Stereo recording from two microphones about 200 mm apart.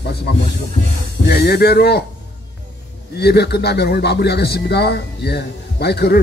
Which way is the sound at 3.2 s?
55° left (ahead or behind).